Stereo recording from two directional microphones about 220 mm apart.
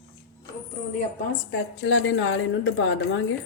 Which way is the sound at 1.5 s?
55° left (ahead or behind).